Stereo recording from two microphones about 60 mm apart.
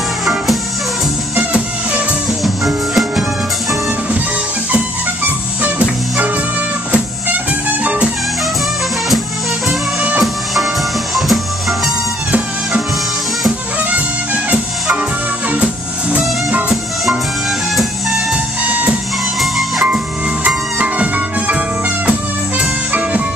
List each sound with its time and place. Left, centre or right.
1.4 s music: centre
2.4 s music: centre
4.7 s music: right
7.8 s music: right
10.2 s music: centre
14.5 s music: right
17.7 s music: centre
18.7 s music: right
19.4 s music: centre
20.4 s music: right